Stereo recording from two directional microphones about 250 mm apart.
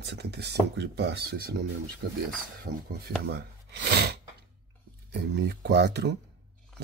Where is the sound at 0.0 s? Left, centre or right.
Right.